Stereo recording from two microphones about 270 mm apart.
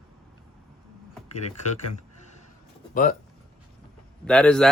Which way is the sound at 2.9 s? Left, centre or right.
Left.